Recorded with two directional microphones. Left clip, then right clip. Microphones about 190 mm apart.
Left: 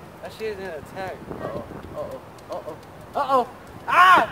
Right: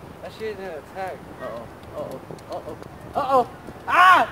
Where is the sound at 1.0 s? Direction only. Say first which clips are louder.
Right 2 dB; 25° left (ahead or behind).